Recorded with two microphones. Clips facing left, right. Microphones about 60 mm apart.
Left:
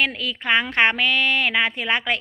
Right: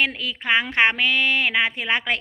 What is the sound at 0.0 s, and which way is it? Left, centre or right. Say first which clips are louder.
Speech: left 1 dB; right.